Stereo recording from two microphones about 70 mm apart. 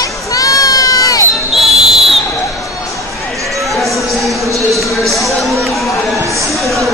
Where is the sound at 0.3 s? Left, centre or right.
Left.